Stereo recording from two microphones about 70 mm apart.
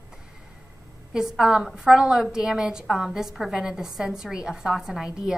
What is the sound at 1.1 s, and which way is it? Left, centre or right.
A woman's voice, centre.